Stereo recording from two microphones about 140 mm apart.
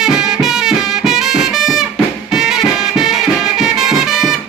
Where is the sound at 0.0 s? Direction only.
5° right (ahead or behind).